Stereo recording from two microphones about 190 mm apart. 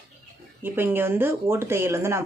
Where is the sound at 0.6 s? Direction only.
10° right (ahead or behind).